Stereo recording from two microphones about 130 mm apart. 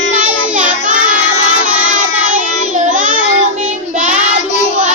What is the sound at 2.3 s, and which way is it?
Child singing, 80° right.